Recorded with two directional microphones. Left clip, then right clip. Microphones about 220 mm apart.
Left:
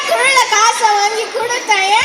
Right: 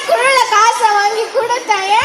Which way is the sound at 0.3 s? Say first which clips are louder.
Right 1 dB; 20° left (ahead or behind).